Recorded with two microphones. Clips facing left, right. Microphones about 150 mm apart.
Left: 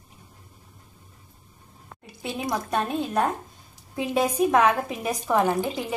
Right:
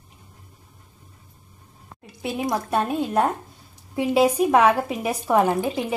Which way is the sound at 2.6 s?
10° right (ahead or behind).